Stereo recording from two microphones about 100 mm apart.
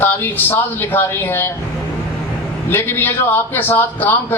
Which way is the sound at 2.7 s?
20° left (ahead or behind).